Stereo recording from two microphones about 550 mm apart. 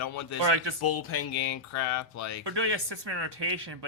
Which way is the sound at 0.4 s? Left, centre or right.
Right.